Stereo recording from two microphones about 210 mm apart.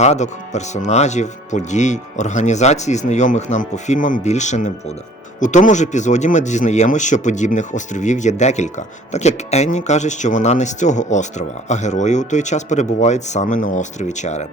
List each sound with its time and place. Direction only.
0.0 s speech: 35° left (ahead or behind)